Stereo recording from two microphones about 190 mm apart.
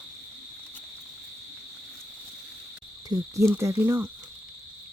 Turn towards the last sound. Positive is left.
turn(degrees=-10)  # may be behind; listen again after turning